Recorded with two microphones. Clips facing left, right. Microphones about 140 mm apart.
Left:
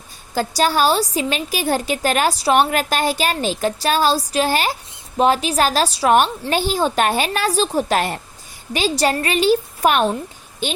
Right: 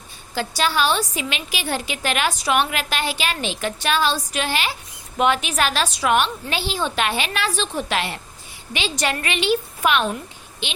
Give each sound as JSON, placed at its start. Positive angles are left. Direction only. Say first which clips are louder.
{"t": 0.3, "sound": "a woman's voice", "louder": "left 4 dB", "side_deg": 40}